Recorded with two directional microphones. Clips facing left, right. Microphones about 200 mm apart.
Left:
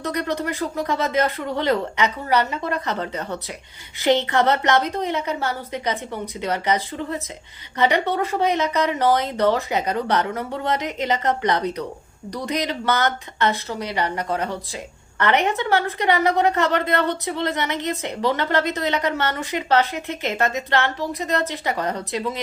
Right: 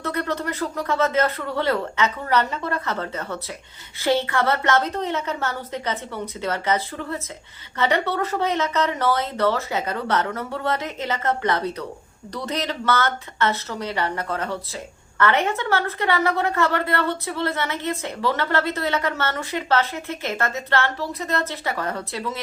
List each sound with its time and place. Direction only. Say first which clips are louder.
0.0 s a woman's voice: left 1 dB; 15° left (ahead or behind)